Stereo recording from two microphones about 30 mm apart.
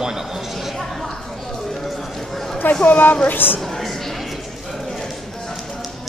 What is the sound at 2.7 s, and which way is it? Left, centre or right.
Speech, left.